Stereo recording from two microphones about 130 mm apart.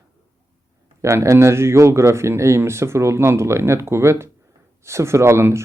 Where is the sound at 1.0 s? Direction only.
20° right (ahead or behind).